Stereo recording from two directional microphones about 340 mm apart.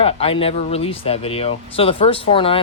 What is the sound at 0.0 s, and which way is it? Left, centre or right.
Speech, centre.